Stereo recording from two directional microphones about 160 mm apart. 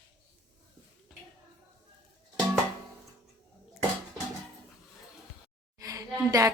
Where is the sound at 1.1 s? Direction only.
Centre (ahead or behind).